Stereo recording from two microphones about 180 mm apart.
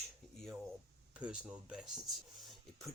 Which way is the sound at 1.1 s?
5° right (ahead or behind).